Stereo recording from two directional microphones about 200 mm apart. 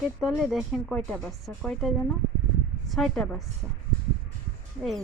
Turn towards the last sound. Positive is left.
turn(degrees=0)  # may be behind; listen again after turning